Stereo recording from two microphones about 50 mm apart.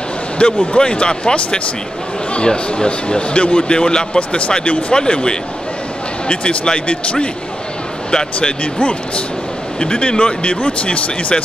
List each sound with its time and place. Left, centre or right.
0.4 s speech: left